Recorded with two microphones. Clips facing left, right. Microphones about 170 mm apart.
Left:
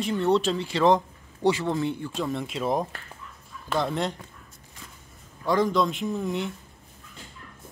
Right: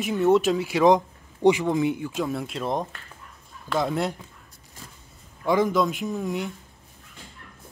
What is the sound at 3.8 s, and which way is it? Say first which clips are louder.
Speech: right 2 dB; 10° right (ahead or behind).